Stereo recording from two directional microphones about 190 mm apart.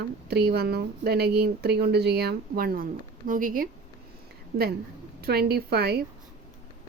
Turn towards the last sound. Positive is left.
turn(degrees=-55)  # may be behind; listen again after turning